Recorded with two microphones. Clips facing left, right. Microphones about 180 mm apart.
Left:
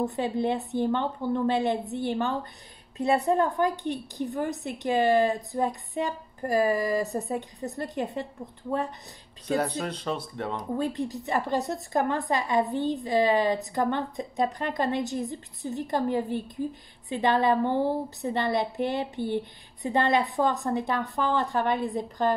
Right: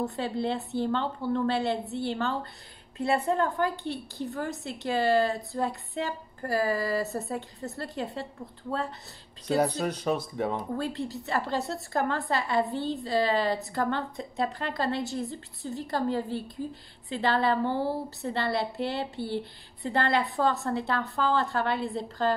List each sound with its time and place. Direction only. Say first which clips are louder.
0.1 s a woman's voice: left 3 dB; 15° left (ahead or behind)
9.6 s speech: right 3 dB; 10° right (ahead or behind)
10.8 s a woman's voice: left 3 dB; 20° left (ahead or behind)